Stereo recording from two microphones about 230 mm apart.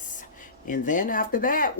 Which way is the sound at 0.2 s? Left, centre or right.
Left.